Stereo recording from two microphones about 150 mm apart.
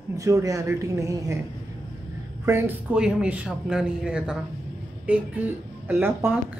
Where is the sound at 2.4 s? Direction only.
15° right (ahead or behind).